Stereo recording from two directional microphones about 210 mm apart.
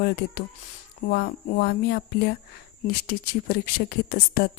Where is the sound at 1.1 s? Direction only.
45° left (ahead or behind).